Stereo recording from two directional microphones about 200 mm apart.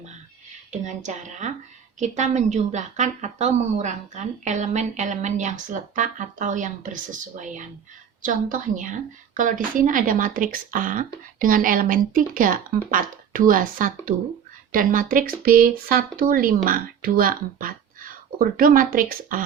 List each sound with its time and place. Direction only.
0.7 s a woman's voice: 35° right (ahead or behind)